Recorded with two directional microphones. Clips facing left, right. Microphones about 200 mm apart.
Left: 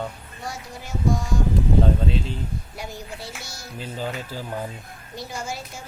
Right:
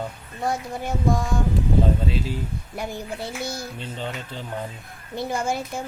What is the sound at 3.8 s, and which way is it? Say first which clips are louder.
Speech: left 2 dB; 5° left (ahead or behind).